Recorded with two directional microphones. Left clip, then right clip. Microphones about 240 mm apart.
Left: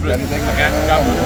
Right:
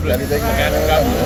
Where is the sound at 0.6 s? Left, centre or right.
Centre.